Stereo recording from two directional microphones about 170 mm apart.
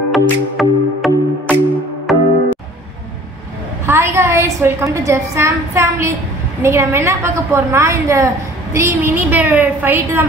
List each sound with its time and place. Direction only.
0.1 s music: centre (ahead or behind)
3.8 s a woman's voice: 15° right (ahead or behind)